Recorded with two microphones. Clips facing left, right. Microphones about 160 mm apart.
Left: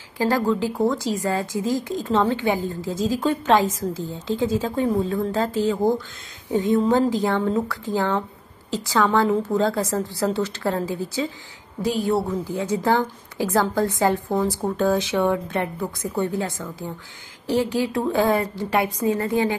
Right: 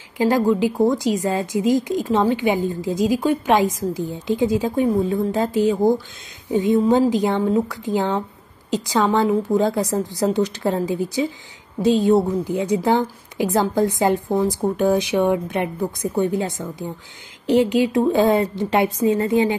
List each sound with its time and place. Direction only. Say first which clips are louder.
0.2 s a woman's voice: right 4 dB; 15° right (ahead or behind)